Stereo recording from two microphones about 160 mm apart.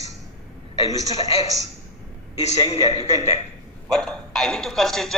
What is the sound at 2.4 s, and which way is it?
A man's voice, 40° left (ahead or behind).